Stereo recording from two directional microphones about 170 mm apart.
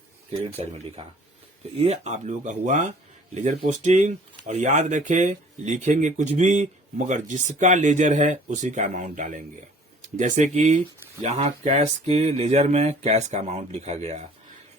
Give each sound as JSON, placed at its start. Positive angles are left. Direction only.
{"t": 0.3, "sound": "speech", "side_deg": -35}